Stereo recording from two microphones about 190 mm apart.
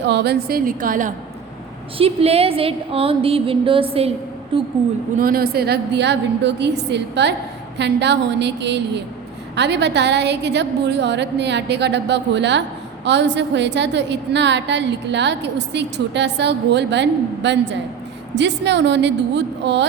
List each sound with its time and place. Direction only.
0.1 s a woman's voice: 60° right (ahead or behind); by 1.1 s 45° right (ahead or behind)
2.0 s a woman's voice: 30° right (ahead or behind)
5.1 s a woman's voice: 50° right (ahead or behind); by 19.9 s 65° right (ahead or behind)